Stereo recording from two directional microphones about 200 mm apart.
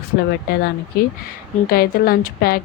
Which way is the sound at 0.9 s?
50° left (ahead or behind).